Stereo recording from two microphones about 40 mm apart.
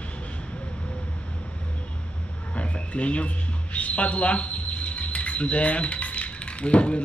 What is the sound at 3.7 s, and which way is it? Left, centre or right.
Speech, left.